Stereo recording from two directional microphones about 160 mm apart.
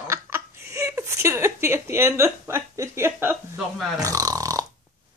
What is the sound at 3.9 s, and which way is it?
Burping, 20° right (ahead or behind).